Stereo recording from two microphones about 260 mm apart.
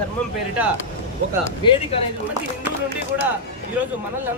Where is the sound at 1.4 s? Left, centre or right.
Centre.